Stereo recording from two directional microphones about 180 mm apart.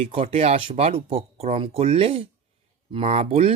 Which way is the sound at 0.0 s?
35° right (ahead or behind).